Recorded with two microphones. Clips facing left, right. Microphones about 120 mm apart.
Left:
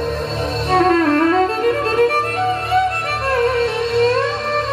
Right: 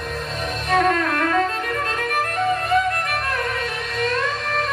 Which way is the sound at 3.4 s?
30° left (ahead or behind).